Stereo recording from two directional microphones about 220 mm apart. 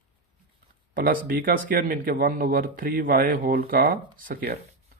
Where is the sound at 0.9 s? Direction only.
40° right (ahead or behind).